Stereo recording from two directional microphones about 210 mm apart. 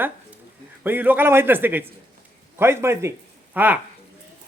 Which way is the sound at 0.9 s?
10° right (ahead or behind).